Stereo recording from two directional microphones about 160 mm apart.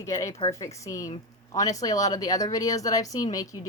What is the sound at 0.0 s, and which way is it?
Speech, 20° left (ahead or behind).